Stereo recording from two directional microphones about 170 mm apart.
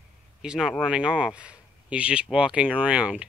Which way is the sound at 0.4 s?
Centre (ahead or behind).